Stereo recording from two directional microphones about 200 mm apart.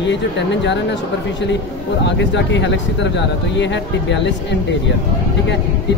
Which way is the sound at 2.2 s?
60° left (ahead or behind).